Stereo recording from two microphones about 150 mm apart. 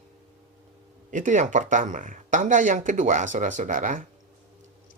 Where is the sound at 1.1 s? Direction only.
55° right (ahead or behind).